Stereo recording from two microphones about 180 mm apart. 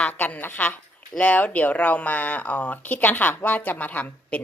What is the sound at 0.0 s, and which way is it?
Speech, 10° left (ahead or behind).